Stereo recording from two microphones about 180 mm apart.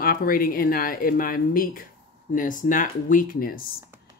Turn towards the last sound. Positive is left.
turn(degrees=50)  # may be behind; listen again after turning